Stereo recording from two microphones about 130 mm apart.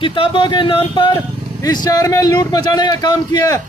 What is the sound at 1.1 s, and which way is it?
Vehicle, 25° left (ahead or behind).